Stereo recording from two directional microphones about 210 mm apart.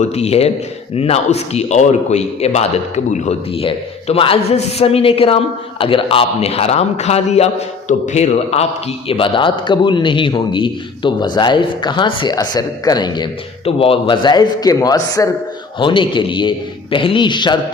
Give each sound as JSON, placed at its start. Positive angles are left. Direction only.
{"t": 0.0, "sound": "a man's voice", "side_deg": 30}